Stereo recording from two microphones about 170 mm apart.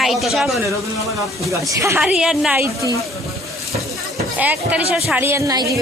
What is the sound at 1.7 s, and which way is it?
Speech, 15° right (ahead or behind).